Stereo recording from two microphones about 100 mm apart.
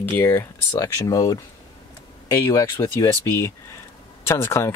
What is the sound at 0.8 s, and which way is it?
Speech, 35° left (ahead or behind).